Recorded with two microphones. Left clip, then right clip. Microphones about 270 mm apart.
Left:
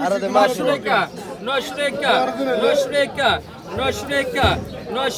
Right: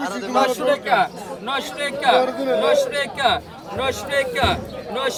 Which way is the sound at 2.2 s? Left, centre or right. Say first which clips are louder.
Even; right.